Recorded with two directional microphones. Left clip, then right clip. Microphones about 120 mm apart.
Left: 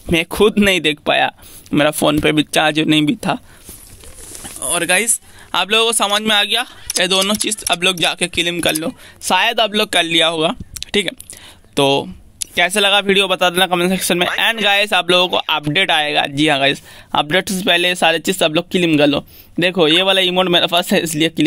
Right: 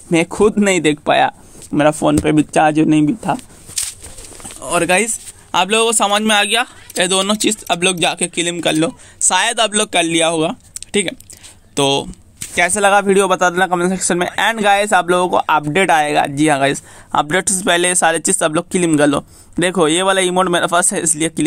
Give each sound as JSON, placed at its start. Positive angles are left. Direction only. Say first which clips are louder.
{"t": 0.1, "sound": "speech", "louder": "even", "side_deg": 5}
{"t": 1.7, "sound": "speech", "louder": "right 1 dB", "side_deg": 25}
{"t": 4.6, "sound": "speech", "louder": "right 2 dB", "side_deg": 5}
{"t": 5.0, "sound": "speech", "louder": "even", "side_deg": 20}
{"t": 6.5, "sound": "speech", "louder": "right 1 dB", "side_deg": 5}
{"t": 9.3, "sound": "speech", "louder": "left 1 dB", "side_deg": -10}
{"t": 10.0, "sound": "speech", "louder": "left 1 dB", "side_deg": 15}
{"t": 12.4, "sound": "a sound", "louder": "even", "side_deg": 5}
{"t": 12.7, "sound": "speech", "louder": "right 2 dB", "side_deg": 25}
{"t": 14.5, "sound": "speech", "louder": "right 5 dB", "side_deg": 25}
{"t": 16.0, "sound": "speech", "louder": "right 1 dB", "side_deg": 10}